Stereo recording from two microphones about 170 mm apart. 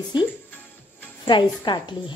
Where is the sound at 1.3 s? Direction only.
25° left (ahead or behind).